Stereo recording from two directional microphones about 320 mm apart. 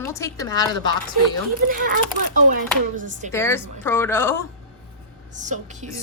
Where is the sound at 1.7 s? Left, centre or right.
Right.